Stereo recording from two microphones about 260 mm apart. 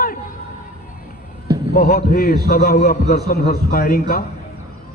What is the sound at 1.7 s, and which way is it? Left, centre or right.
Speech, left.